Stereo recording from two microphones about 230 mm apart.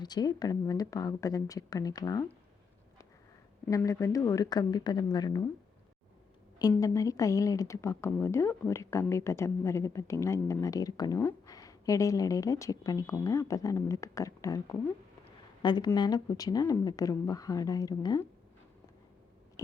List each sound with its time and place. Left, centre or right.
0.0 s speech: centre
3.7 s speech: centre
6.6 s speech: centre